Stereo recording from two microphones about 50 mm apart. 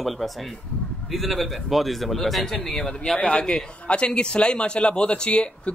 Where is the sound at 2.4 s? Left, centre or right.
Centre.